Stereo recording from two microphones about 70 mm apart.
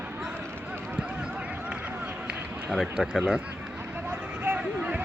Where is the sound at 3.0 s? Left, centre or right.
Centre.